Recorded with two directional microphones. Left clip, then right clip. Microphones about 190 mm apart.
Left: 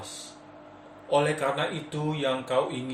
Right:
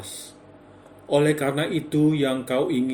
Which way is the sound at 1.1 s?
60° right (ahead or behind).